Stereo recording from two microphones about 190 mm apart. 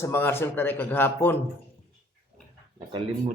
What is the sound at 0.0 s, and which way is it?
A man's voice, 15° left (ahead or behind).